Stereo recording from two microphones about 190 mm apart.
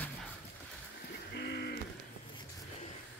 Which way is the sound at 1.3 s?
60° left (ahead or behind).